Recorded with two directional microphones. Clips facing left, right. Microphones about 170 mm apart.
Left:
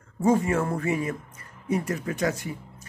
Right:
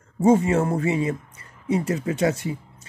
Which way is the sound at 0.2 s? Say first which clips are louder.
Right 4 dB; 20° right (ahead or behind).